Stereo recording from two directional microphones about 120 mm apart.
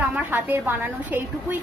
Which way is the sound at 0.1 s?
15° right (ahead or behind).